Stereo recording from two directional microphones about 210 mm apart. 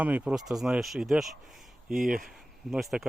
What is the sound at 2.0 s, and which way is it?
Speech, 40° right (ahead or behind).